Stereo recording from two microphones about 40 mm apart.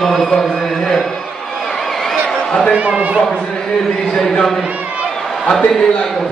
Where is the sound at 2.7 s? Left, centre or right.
Right.